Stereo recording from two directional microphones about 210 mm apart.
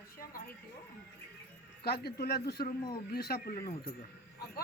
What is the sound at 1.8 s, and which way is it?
A woman's voice, 50° left (ahead or behind).